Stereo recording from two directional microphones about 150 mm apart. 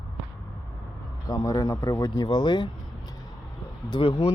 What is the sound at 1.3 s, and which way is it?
Speech, 25° left (ahead or behind).